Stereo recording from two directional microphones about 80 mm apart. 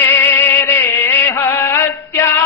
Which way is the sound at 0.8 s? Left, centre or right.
Left.